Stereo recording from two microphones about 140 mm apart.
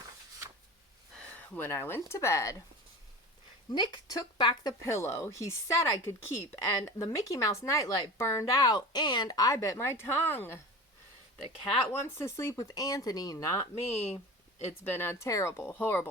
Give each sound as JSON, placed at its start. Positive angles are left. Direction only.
{"t": 1.5, "sound": "speech", "side_deg": 15}
{"t": 3.7, "sound": "speech", "side_deg": 30}
{"t": 11.9, "sound": "speech", "side_deg": 15}
{"t": 13.8, "sound": "speech", "side_deg": 45}
{"t": 14.9, "sound": "speech", "side_deg": 15}